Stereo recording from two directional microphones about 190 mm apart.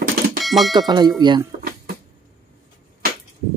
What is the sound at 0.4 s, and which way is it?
Music, centre (ahead or behind).